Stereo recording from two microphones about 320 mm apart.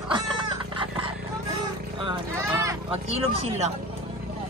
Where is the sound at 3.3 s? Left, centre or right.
Centre.